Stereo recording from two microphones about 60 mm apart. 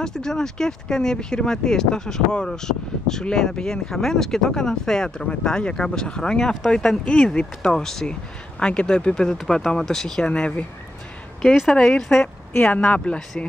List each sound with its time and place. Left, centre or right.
0.0 s speech: centre
11.9 s speech: centre
12.6 s speech: left